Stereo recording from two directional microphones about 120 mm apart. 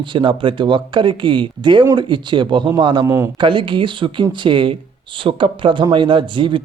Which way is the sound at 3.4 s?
45° right (ahead or behind).